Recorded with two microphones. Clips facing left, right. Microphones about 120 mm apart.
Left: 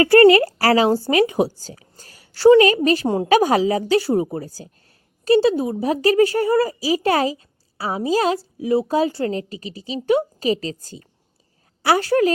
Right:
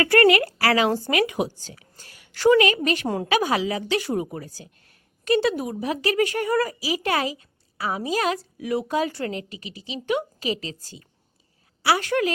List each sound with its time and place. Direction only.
0.0 s a child's voice: 30° left (ahead or behind)
3.2 s a child's voice: 40° left (ahead or behind)